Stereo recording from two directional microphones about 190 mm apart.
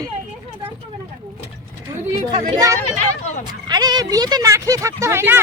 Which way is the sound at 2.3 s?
20° right (ahead or behind).